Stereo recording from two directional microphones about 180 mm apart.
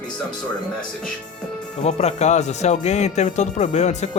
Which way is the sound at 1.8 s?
40° left (ahead or behind).